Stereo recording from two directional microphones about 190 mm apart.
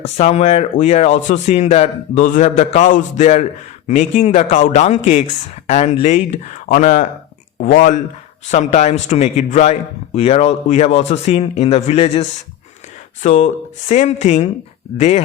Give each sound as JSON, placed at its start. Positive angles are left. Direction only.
{"t": 0.2, "sound": "a man's voice", "side_deg": 35}